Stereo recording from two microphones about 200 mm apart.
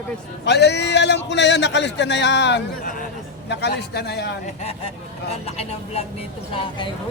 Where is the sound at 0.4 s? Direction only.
55° left (ahead or behind).